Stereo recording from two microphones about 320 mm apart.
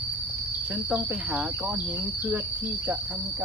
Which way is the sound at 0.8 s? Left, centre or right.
Centre.